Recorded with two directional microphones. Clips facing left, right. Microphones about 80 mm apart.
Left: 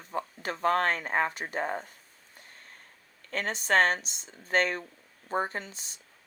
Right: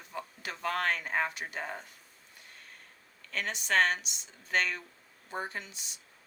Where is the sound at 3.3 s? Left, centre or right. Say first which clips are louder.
Left 4 dB; left.